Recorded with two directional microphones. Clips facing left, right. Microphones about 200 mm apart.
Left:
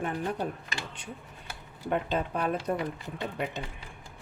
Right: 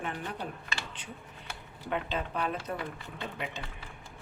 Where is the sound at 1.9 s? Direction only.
40° left (ahead or behind).